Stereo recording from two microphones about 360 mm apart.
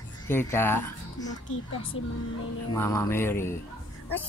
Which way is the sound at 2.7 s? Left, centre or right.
Centre.